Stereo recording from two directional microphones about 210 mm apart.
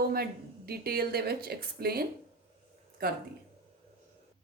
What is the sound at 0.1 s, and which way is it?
A woman's voice, 45° right (ahead or behind).